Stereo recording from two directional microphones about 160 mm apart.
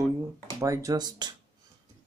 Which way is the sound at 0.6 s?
20° right (ahead or behind).